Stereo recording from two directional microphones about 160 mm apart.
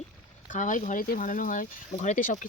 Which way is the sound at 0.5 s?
55° left (ahead or behind).